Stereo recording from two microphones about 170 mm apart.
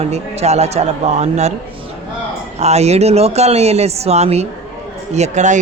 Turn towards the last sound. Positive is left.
turn(degrees=-45)  # may be behind; listen again after turning